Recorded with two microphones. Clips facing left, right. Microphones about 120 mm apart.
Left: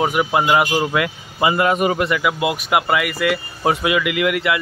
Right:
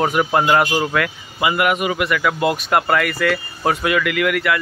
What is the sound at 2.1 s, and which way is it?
Speech, 10° left (ahead or behind).